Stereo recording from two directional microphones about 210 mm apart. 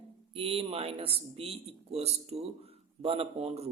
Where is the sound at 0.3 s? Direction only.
25° right (ahead or behind).